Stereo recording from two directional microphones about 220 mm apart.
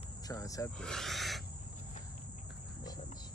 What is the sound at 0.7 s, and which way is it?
Speech, centre (ahead or behind).